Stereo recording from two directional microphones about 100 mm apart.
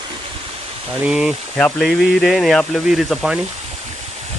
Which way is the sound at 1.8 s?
Centre (ahead or behind).